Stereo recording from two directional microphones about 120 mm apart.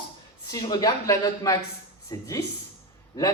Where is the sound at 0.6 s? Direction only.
35° left (ahead or behind).